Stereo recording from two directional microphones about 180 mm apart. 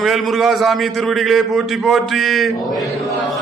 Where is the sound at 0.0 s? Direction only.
Centre (ahead or behind).